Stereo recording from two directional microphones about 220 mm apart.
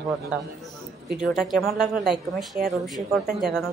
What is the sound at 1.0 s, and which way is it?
A woman's voice, centre (ahead or behind).